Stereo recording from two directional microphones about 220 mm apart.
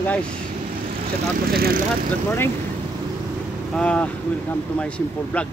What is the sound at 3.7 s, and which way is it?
Speech, 5° left (ahead or behind).